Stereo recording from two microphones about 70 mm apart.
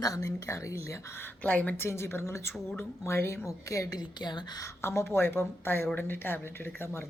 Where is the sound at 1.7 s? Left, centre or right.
Left.